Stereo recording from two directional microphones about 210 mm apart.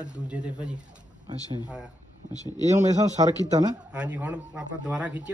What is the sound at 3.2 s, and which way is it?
Speech, 20° right (ahead or behind).